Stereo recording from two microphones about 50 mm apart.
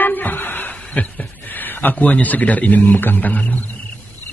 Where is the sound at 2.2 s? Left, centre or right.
Left.